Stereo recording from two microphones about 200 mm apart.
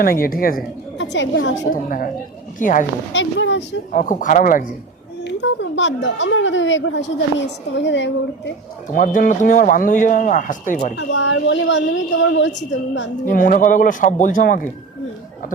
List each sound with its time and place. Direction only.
0.0 s speech: 45° left (ahead or behind)
0.9 s a woman's voice: 65° left (ahead or behind)
1.7 s speech: 45° left (ahead or behind)
3.1 s speech: 65° left (ahead or behind)
3.9 s speech: 40° left (ahead or behind)
5.2 s a woman's voice: 60° left (ahead or behind)
9.0 s speech: 40° left (ahead or behind)
10.9 s a woman's voice: 65° left (ahead or behind)
13.2 s speech: 45° left (ahead or behind)